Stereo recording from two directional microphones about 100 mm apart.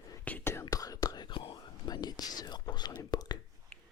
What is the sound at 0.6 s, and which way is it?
Whispering, 40° left (ahead or behind).